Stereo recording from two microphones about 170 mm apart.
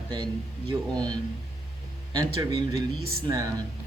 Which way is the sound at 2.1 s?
25° right (ahead or behind).